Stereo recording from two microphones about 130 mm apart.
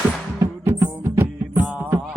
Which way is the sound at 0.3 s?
20° right (ahead or behind).